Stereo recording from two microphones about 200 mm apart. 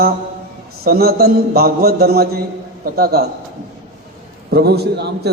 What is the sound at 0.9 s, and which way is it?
A man's voice, 50° right (ahead or behind).